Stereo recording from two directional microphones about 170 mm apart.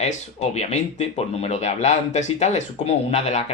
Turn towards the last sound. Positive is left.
turn(degrees=40)  # may be behind; listen again after turning